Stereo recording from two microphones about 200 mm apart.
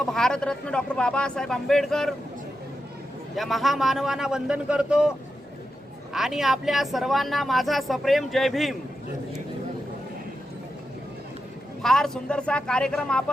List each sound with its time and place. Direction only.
0.0 s speech: centre (ahead or behind)
3.3 s speech: centre (ahead or behind)
6.1 s speech: centre (ahead or behind)
11.8 s speech: centre (ahead or behind)